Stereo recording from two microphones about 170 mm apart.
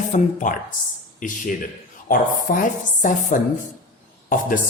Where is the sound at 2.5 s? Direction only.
55° left (ahead or behind).